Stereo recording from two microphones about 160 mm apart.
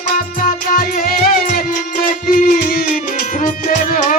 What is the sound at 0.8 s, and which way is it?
Music, 65° left (ahead or behind).